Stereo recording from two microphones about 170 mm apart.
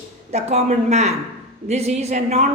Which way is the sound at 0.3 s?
40° right (ahead or behind).